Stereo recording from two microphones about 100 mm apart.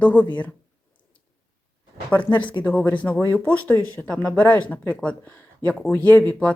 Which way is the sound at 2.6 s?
15° left (ahead or behind).